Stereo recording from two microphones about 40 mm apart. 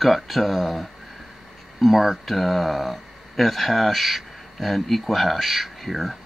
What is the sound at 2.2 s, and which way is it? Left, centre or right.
Speech, centre.